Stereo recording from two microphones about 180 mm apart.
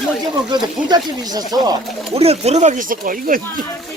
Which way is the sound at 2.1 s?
35° right (ahead or behind).